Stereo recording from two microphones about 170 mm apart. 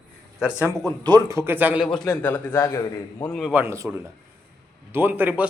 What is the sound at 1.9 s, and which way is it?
Speech, 5° left (ahead or behind).